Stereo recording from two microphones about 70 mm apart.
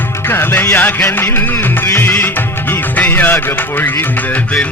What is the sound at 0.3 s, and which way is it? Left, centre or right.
Speech, left.